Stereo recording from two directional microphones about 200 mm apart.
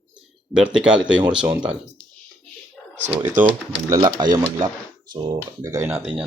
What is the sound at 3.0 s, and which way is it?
Speech, 30° right (ahead or behind).